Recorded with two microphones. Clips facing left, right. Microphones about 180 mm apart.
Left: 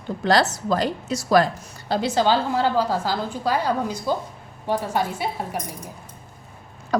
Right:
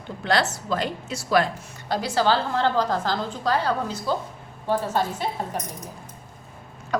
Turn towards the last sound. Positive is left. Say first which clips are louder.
# left 4 dB
turn(degrees=35)  # may be behind; listen again after turning